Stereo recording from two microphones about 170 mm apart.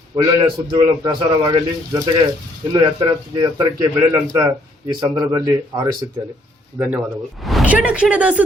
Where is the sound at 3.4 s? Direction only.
20° right (ahead or behind).